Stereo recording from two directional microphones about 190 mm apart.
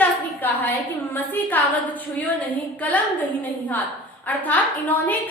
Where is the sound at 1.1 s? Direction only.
10° left (ahead or behind).